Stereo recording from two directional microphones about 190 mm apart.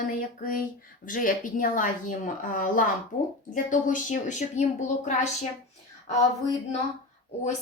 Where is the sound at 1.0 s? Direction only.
45° left (ahead or behind).